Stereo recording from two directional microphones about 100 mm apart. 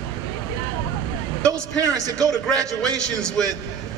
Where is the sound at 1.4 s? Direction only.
35° right (ahead or behind).